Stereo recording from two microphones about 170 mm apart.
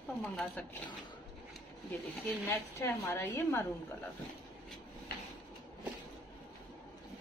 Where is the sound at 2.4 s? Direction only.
15° left (ahead or behind).